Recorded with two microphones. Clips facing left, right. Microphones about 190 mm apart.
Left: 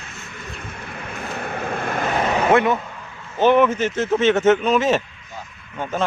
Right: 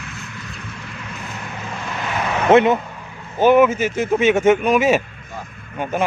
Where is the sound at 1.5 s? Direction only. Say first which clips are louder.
Left 5 dB; 55° left (ahead or behind).